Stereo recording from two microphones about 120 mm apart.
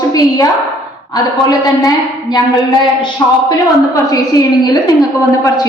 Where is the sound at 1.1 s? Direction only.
35° left (ahead or behind).